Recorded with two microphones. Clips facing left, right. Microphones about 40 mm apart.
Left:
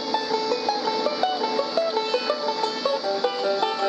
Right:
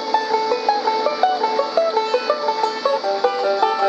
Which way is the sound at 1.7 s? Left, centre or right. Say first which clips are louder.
Right 5 dB; centre.